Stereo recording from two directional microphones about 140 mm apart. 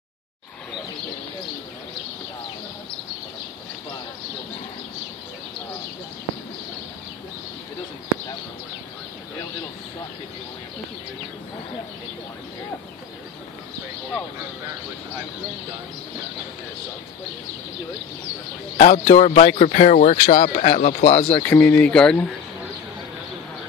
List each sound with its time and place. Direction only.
18.8 s speech: 55° left (ahead or behind)
21.4 s speech: 15° left (ahead or behind)